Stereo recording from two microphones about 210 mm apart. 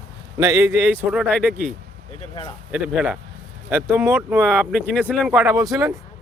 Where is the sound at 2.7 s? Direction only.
5° right (ahead or behind).